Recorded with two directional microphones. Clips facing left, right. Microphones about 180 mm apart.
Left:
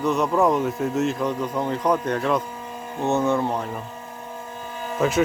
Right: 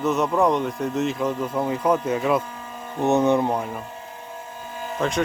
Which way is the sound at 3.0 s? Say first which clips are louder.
Right 3 dB; 20° right (ahead or behind).